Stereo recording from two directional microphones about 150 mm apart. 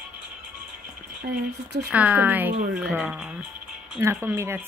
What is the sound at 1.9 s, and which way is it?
A woman's voice, 10° right (ahead or behind).